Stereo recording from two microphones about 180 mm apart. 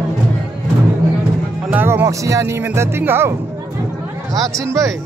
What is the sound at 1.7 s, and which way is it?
Speech, 10° right (ahead or behind).